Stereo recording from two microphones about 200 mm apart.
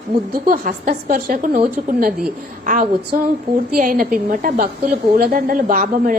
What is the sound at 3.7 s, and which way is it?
A woman's voice, 45° right (ahead or behind).